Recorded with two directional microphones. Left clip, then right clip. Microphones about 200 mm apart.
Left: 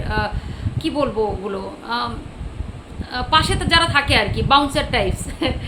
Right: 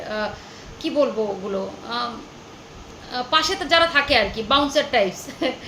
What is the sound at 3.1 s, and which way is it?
A woman's voice, 15° left (ahead or behind).